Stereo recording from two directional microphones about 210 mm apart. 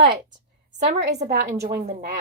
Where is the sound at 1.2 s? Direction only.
35° right (ahead or behind).